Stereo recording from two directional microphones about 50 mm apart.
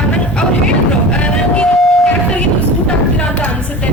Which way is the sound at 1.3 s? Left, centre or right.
Left.